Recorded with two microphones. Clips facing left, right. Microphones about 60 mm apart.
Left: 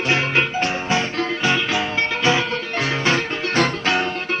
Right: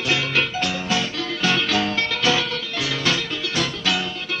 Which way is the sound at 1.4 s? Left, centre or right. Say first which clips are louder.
Right 2 dB; left.